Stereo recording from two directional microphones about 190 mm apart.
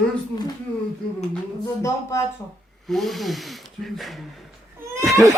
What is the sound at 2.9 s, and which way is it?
Speech, centre (ahead or behind).